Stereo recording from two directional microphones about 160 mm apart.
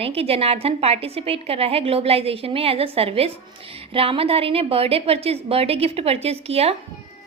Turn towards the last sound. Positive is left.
turn(degrees=-40)  # may be behind; listen again after turning